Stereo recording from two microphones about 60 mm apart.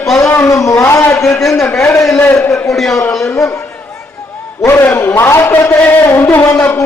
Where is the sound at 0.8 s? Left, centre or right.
Left.